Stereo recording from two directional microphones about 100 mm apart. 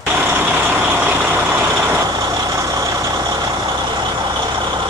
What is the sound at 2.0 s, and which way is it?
Vehicle, 40° right (ahead or behind).